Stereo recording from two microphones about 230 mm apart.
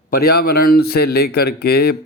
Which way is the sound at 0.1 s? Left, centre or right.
Left.